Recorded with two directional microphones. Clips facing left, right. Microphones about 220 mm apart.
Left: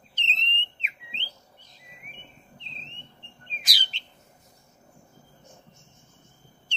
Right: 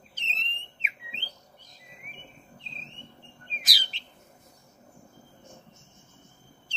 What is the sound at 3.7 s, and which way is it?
Bird, centre (ahead or behind).